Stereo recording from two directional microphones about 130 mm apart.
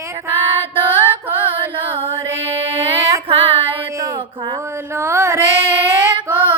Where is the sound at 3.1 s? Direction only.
45° right (ahead or behind).